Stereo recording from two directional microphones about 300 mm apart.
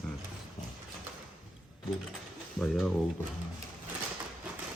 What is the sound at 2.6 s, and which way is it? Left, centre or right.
Speech, centre.